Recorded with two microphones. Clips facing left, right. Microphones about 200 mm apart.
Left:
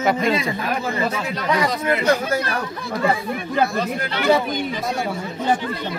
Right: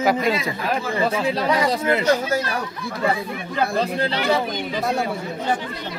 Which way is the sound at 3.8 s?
30° right (ahead or behind).